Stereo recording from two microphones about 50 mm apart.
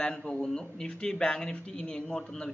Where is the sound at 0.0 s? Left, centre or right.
Centre.